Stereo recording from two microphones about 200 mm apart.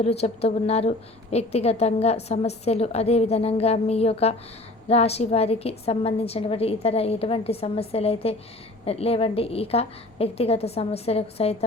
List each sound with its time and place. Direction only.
0.0 s a woman's voice: 30° left (ahead or behind)